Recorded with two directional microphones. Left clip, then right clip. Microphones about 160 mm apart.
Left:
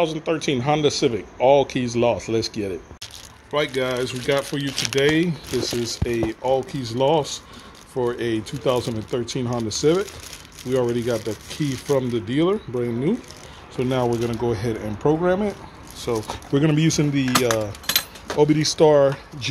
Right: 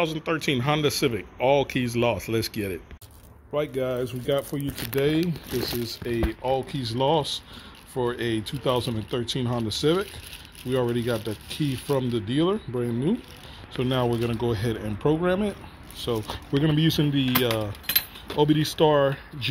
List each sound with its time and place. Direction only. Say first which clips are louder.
0.0 s speech: left 4 dB; centre (ahead or behind)
18.8 s speech: left 6 dB; 15° left (ahead or behind)